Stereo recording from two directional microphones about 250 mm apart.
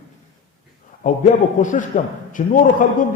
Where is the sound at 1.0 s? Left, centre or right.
Left.